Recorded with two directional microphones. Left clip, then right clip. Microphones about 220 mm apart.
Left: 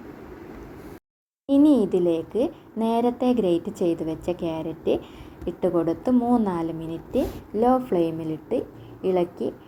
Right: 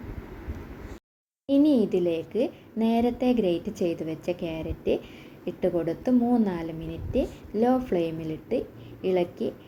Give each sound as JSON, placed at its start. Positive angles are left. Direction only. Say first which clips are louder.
{"t": 1.5, "sound": "a woman's voice", "louder": "left 3 dB", "side_deg": 10}